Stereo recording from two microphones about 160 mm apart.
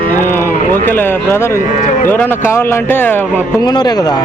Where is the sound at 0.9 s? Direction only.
15° left (ahead or behind).